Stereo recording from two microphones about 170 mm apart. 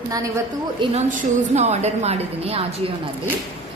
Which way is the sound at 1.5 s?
40° right (ahead or behind).